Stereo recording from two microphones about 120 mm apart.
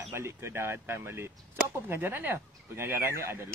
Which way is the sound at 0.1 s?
25° right (ahead or behind).